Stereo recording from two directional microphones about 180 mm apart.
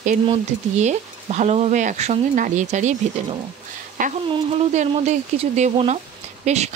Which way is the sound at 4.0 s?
45° right (ahead or behind).